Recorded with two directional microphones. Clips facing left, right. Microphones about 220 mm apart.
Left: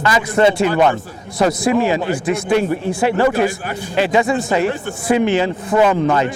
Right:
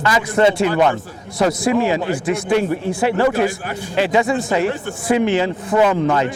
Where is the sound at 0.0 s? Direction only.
20° left (ahead or behind).